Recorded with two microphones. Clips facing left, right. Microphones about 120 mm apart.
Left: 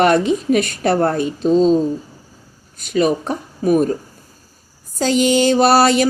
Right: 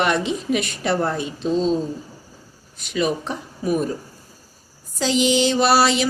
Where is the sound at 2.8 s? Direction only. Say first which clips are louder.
Left 6 dB; 45° left (ahead or behind).